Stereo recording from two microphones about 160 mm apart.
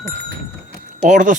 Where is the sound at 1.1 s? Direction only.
55° right (ahead or behind).